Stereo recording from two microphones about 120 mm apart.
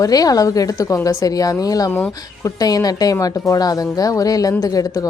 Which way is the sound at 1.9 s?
15° left (ahead or behind).